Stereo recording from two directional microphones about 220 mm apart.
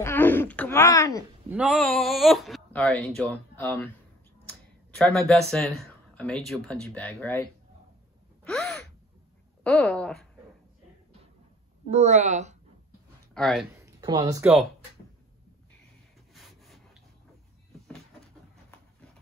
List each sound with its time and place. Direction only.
0.0 s speech: 10° left (ahead or behind)
1.5 s speech: centre (ahead or behind)
4.5 s a sound: 5° left (ahead or behind)
5.5 s speech: centre (ahead or behind)
8.5 s gasp: centre (ahead or behind)
9.6 s speech: 5° left (ahead or behind)
11.9 s a woman's voice: 30° right (ahead or behind)
13.3 s speech: centre (ahead or behind)
13.7 s a sound: 15° right (ahead or behind)
16.3 s rub: centre (ahead or behind)